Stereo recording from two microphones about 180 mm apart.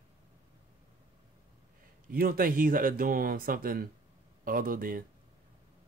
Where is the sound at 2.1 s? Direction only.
55° right (ahead or behind).